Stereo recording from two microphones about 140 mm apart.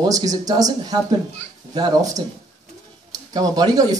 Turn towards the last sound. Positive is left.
turn(degrees=-25)  # may be behind; listen again after turning